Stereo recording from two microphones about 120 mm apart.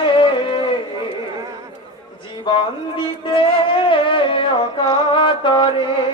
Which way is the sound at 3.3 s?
45° left (ahead or behind).